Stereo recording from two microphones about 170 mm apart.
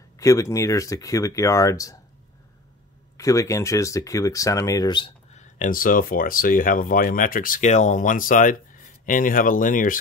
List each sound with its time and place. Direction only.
0.2 s speech: 20° left (ahead or behind)
3.2 s speech: 20° left (ahead or behind)
5.3 s speech: 45° left (ahead or behind)